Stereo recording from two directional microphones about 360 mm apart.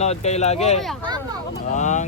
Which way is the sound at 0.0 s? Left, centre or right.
Centre.